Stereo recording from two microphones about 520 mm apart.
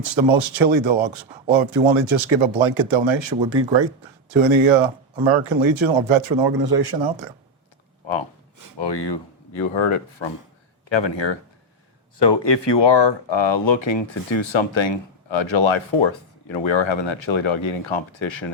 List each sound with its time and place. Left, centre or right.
0.0 s a man's voice: right
8.0 s speech: left